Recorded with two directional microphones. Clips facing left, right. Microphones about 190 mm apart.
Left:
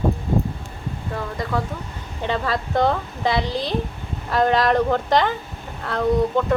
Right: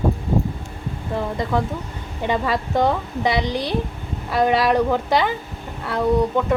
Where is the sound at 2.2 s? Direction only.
15° right (ahead or behind).